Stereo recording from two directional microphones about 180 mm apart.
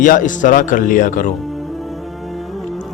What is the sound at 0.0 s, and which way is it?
A man's voice, 45° left (ahead or behind).